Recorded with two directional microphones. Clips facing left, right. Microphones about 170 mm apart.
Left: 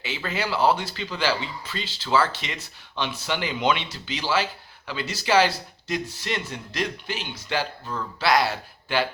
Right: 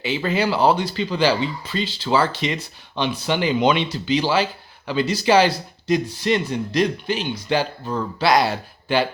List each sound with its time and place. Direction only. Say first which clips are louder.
0.0 s speech: right 8 dB; 15° right (ahead or behind)